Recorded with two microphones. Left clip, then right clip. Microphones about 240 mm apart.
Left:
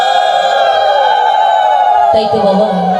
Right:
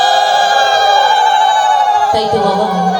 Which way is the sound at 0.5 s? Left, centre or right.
Right.